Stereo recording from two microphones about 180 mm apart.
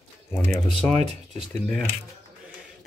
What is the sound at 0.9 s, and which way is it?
Speech, 40° right (ahead or behind).